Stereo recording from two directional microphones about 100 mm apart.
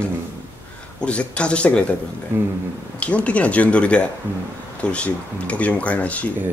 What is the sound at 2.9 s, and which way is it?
Speech, 10° left (ahead or behind).